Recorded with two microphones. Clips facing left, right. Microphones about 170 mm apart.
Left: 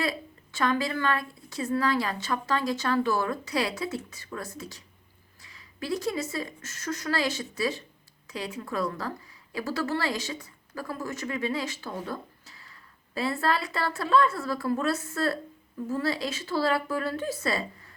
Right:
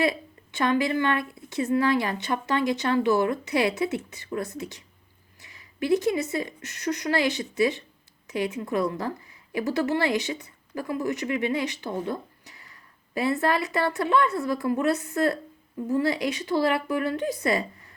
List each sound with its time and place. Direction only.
0.5 s a woman's voice: 20° right (ahead or behind)
5.4 s a sound: 20° right (ahead or behind)
6.3 s a woman's voice: 20° right (ahead or behind)